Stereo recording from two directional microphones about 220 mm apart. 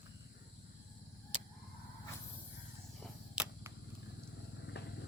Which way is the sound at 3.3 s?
5° right (ahead or behind).